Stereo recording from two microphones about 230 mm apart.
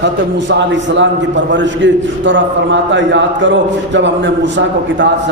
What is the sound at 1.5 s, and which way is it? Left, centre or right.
A man's voice, right.